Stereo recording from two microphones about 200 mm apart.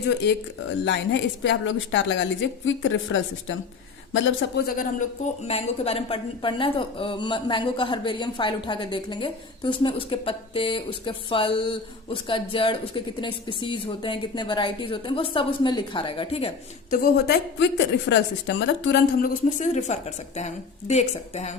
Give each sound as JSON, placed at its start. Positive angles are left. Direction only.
{"t": 0.9, "sound": "a woman's voice", "side_deg": 65}
{"t": 4.6, "sound": "a woman's voice", "side_deg": 40}
{"t": 5.5, "sound": "a woman's voice", "side_deg": 30}
{"t": 16.9, "sound": "a woman's voice", "side_deg": 50}
{"t": 19.5, "sound": "a woman's voice", "side_deg": 35}